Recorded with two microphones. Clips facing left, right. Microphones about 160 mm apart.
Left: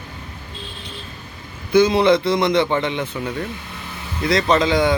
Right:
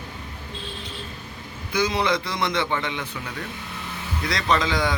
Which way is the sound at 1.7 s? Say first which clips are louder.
Left 9 dB; 25° left (ahead or behind).